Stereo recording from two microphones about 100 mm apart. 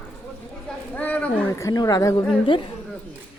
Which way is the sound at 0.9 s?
15° left (ahead or behind).